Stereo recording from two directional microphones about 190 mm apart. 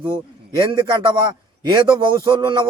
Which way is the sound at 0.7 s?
25° right (ahead or behind).